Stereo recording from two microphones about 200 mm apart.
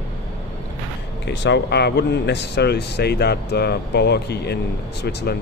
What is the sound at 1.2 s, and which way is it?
Speech, 60° left (ahead or behind).